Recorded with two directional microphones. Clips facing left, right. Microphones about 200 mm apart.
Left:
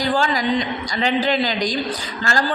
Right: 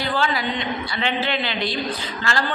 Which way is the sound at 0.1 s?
40° left (ahead or behind).